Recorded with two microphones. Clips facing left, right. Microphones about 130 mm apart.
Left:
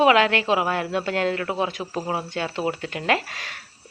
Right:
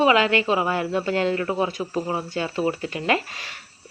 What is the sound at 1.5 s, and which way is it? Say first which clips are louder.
Speech: right 2 dB; centre (ahead or behind).